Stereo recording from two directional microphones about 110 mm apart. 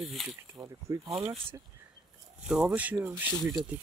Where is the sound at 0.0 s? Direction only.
Centre (ahead or behind).